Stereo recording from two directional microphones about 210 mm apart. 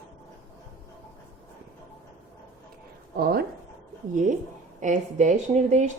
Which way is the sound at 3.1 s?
45° right (ahead or behind).